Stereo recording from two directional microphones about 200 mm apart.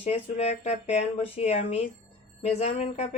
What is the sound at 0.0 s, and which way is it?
Speech, 30° left (ahead or behind).